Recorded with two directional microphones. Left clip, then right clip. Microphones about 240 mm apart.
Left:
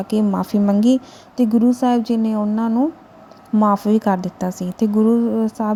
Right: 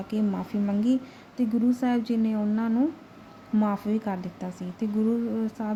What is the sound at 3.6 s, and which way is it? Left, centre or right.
A woman's voice, left.